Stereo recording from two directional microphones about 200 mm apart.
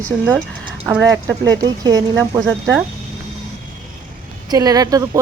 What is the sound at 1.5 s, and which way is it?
Speech, 20° right (ahead or behind).